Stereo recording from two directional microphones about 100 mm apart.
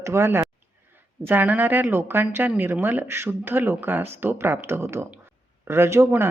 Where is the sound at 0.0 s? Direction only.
25° right (ahead or behind).